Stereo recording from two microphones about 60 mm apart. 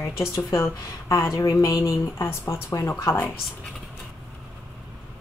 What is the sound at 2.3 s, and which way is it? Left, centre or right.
Speech, left.